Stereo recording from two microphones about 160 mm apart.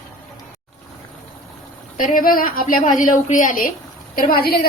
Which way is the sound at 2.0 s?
60° left (ahead or behind).